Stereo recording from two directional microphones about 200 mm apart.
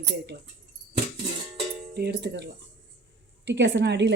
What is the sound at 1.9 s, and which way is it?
Speech, 55° right (ahead or behind).